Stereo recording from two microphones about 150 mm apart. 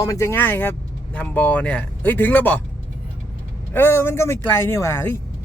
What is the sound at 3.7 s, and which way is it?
Speech, 15° left (ahead or behind).